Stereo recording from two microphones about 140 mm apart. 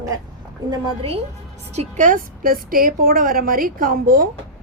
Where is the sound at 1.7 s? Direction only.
60° right (ahead or behind).